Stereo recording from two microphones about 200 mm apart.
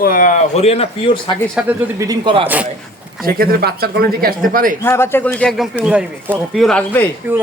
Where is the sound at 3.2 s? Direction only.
45° right (ahead or behind).